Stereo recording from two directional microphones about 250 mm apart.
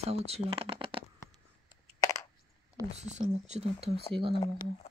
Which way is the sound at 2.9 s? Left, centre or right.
Right.